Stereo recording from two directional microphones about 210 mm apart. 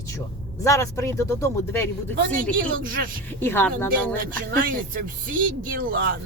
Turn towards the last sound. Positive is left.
turn(degrees=-40)  # may be behind; listen again after turning